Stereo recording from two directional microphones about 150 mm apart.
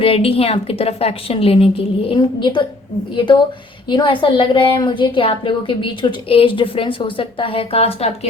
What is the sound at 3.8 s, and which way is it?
A woman's voice, 30° left (ahead or behind).